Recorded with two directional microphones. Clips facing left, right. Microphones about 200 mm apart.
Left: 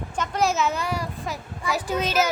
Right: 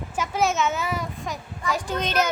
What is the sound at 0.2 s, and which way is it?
A woman's voice, centre (ahead or behind).